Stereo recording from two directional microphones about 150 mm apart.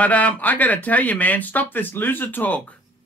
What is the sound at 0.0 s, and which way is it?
Speech, 10° left (ahead or behind).